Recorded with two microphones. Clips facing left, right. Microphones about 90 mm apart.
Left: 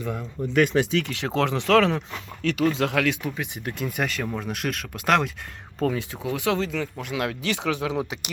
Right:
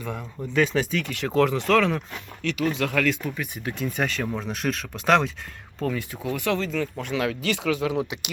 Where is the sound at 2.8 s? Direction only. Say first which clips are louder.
Even; 15° left (ahead or behind).